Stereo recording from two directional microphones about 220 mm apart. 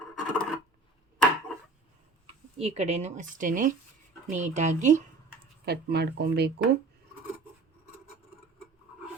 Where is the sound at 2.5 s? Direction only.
30° right (ahead or behind).